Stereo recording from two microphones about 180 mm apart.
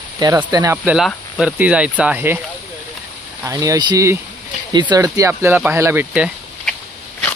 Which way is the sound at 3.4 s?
15° right (ahead or behind).